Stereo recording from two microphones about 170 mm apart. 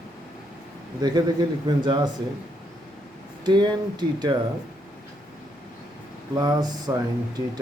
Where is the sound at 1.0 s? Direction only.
25° right (ahead or behind).